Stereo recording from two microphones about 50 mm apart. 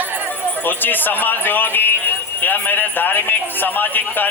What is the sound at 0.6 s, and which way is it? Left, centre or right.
A man's voice, left.